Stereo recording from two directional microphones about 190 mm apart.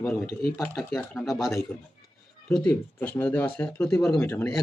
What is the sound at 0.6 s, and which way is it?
Speech, 15° left (ahead or behind).